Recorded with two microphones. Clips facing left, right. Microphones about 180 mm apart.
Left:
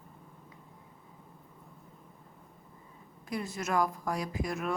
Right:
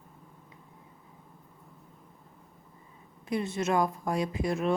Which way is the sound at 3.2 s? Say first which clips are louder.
Right 5 dB; 25° right (ahead or behind).